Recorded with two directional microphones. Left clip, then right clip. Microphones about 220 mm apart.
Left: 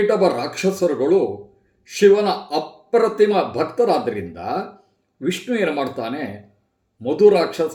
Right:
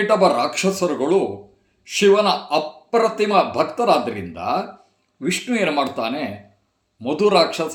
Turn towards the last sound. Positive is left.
turn(degrees=-10)  # may be behind; listen again after turning